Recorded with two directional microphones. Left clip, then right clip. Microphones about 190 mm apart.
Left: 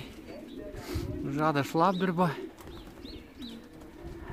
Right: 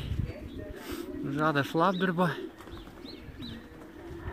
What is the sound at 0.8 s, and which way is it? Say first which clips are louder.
Speech: even; 10° left (ahead or behind).